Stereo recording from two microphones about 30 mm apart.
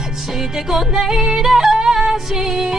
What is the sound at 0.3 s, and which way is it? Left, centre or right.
Music, centre.